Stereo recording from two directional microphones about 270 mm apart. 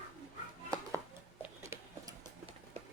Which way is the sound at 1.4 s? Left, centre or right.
Centre.